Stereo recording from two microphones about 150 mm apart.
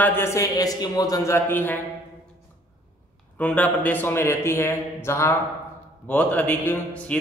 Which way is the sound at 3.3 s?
10° left (ahead or behind).